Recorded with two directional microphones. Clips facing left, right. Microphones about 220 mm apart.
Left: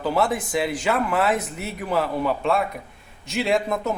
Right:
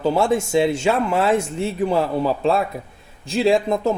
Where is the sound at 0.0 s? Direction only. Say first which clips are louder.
Right 4 dB; 25° right (ahead or behind).